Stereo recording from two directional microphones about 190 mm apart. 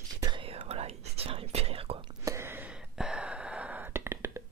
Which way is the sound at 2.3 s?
15° right (ahead or behind).